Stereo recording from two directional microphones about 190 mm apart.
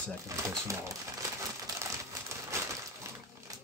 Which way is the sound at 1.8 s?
15° right (ahead or behind).